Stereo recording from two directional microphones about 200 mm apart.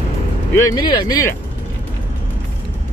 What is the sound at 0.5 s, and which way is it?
Speech, 20° left (ahead or behind).